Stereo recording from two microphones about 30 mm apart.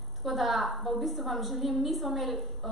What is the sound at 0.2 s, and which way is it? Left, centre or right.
A woman's voice, centre.